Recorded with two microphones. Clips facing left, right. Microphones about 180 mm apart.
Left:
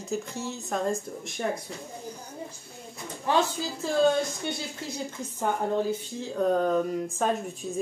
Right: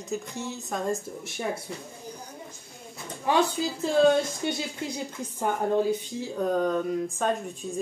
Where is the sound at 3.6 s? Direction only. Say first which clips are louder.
Right 4 dB; 15° right (ahead or behind).